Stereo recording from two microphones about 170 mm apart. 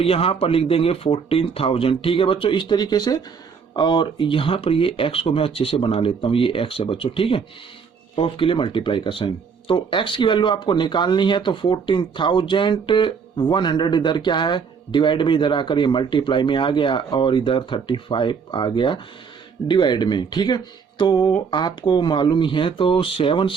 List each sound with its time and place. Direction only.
0.0 s speech: 35° left (ahead or behind)